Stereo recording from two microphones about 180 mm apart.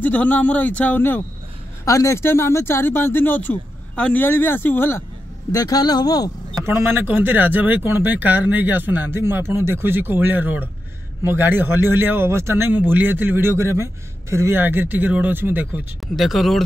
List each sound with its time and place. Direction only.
0.0 s speech: 10° left (ahead or behind)
6.6 s speech: 15° right (ahead or behind)
16.2 s speech: centre (ahead or behind)